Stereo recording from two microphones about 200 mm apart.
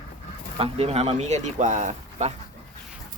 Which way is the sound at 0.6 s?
30° right (ahead or behind).